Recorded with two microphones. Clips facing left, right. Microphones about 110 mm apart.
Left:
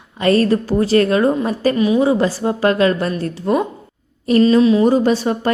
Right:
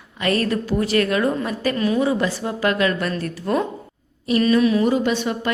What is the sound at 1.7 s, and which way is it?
Speech, 15° left (ahead or behind).